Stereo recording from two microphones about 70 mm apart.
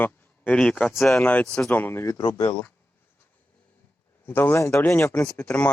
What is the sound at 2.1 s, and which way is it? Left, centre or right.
Speech, left.